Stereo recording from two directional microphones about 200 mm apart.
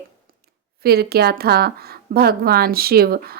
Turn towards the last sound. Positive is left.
turn(degrees=-50)  # may be behind; listen again after turning